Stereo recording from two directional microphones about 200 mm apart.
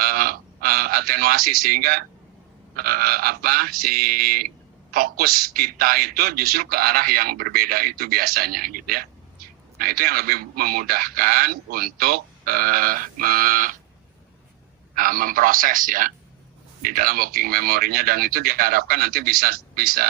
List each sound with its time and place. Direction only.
0.0 s a sound: 45° right (ahead or behind)
2.7 s a man's voice: 50° right (ahead or behind)
14.9 s a man's voice: 45° right (ahead or behind)